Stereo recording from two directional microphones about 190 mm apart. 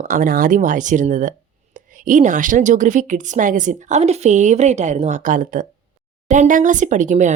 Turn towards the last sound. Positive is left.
turn(degrees=-40)  # may be behind; listen again after turning